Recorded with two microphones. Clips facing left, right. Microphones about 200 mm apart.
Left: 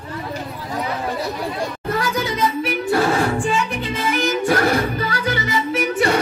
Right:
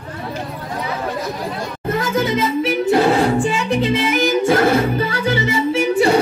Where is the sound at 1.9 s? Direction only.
25° right (ahead or behind).